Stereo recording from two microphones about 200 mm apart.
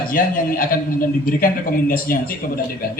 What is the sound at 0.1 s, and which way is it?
A man's voice, 45° left (ahead or behind).